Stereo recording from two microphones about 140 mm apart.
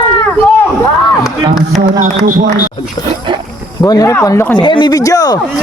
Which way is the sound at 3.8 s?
25° left (ahead or behind).